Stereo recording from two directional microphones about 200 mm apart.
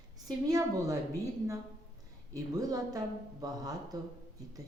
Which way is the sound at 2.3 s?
20° right (ahead or behind).